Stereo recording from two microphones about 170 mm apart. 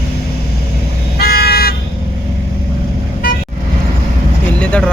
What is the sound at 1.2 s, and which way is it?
Vehicle, 65° left (ahead or behind).